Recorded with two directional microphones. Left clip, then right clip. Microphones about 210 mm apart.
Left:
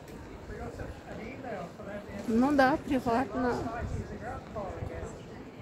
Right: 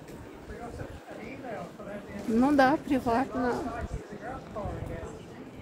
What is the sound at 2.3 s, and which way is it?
Speech, 10° right (ahead or behind).